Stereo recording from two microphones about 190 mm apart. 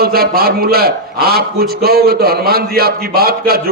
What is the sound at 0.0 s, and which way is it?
A man's voice, 55° right (ahead or behind).